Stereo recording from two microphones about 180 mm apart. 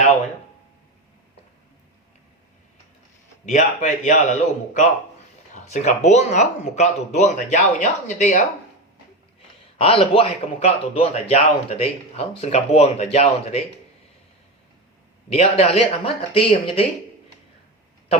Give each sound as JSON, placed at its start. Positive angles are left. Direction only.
{"t": 3.4, "sound": "a man's voice", "side_deg": 40}
{"t": 9.7, "sound": "a man's voice", "side_deg": 35}
{"t": 15.3, "sound": "a man's voice", "side_deg": 35}